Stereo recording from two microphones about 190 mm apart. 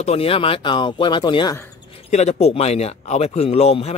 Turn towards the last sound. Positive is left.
turn(degrees=35)  # may be behind; listen again after turning